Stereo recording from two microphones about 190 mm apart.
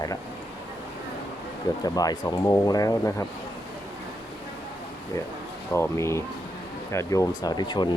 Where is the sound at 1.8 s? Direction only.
20° left (ahead or behind).